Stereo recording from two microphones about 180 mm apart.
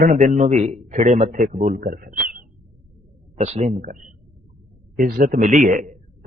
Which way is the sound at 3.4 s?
40° right (ahead or behind).